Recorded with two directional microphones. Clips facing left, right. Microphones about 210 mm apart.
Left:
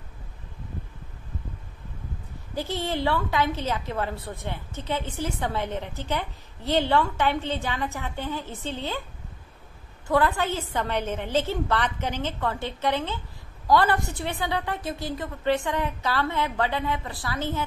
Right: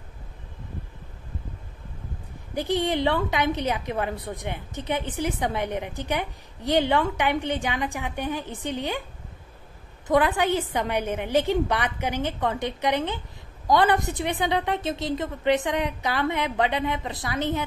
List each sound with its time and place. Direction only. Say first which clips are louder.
2.5 s a woman's voice: right 4 dB; 15° right (ahead or behind)
10.0 s a woman's voice: right 2 dB; 15° right (ahead or behind)